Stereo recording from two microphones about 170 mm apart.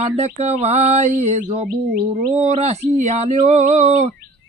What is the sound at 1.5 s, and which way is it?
Bird, 55° right (ahead or behind).